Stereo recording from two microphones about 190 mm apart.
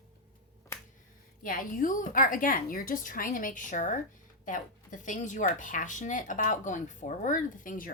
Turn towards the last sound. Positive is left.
turn(degrees=45)  # may be behind; listen again after turning